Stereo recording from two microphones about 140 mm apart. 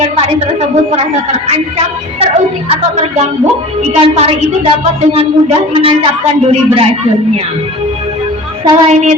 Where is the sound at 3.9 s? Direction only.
45° right (ahead or behind).